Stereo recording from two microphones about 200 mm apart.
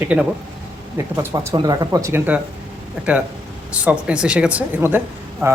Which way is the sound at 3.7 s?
5° right (ahead or behind).